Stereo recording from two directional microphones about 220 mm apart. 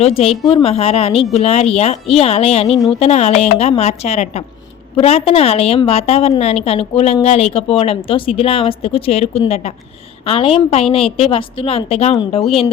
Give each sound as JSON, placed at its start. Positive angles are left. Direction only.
{"t": 0.0, "sound": "a woman's voice", "side_deg": 25}
{"t": 2.6, "sound": "speech", "side_deg": 0}
{"t": 3.0, "sound": "a woman's voice", "side_deg": 30}